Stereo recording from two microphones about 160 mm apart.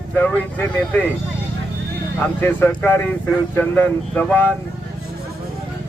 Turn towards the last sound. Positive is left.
turn(degrees=10)  # may be behind; listen again after turning